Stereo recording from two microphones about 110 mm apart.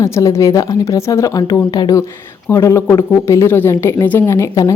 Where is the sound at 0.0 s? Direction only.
30° left (ahead or behind).